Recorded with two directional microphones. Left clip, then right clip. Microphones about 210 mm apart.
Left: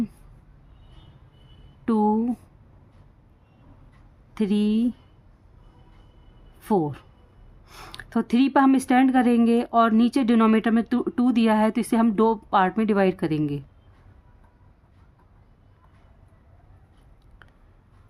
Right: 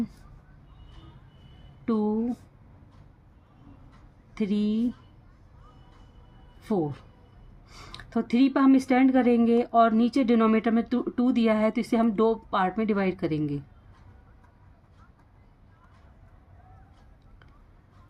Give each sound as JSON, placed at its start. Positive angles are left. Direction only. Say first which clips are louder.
{"t": 1.8, "sound": "a sound", "louder": "left 6 dB", "side_deg": 50}
{"t": 4.4, "sound": "speech", "louder": "left 4 dB", "side_deg": 45}
{"t": 6.6, "sound": "speech", "louder": "left 5 dB", "side_deg": 50}